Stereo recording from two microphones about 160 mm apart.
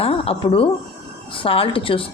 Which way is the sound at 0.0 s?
35° left (ahead or behind).